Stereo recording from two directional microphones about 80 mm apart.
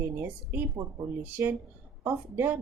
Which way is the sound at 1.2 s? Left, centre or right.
Right.